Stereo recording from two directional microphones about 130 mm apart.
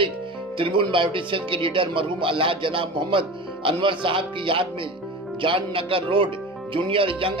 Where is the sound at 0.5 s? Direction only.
40° right (ahead or behind).